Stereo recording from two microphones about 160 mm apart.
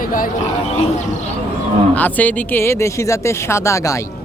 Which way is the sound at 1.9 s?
10° left (ahead or behind).